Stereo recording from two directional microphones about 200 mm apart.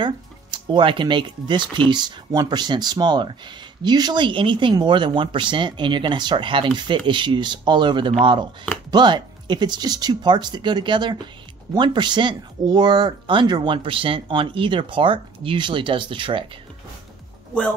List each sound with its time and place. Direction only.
0.0 s speech: 25° right (ahead or behind)